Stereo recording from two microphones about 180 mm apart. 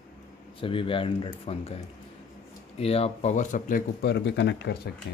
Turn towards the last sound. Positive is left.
turn(degrees=65)  # may be behind; listen again after turning